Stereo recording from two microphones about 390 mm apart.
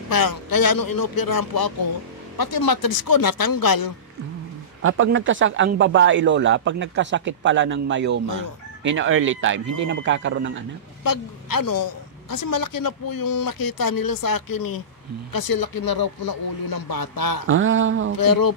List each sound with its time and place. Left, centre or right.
0.1 s a woman's voice: left
4.8 s speech: right
11.1 s a woman's voice: left
17.5 s speech: right
18.1 s a woman's voice: left